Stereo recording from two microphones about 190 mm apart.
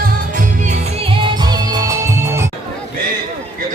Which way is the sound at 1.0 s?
30° right (ahead or behind).